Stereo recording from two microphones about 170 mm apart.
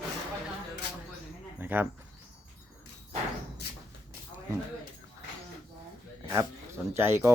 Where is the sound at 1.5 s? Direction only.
10° right (ahead or behind).